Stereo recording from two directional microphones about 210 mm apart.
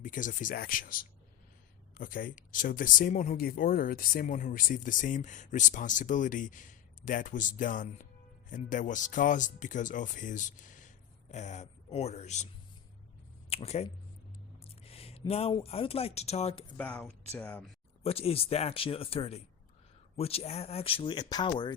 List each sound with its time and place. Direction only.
0.0 s speech: 40° left (ahead or behind)
13.5 s speech: 30° left (ahead or behind)
16.7 s speech: 5° left (ahead or behind)
18.0 s speech: 30° left (ahead or behind)